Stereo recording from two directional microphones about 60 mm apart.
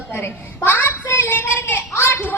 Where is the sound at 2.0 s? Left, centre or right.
Left.